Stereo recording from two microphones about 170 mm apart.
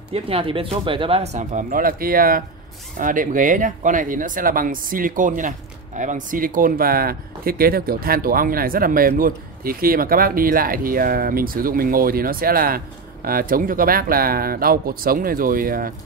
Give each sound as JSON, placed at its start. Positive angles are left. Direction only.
{"t": 0.1, "sound": "speech", "side_deg": -30}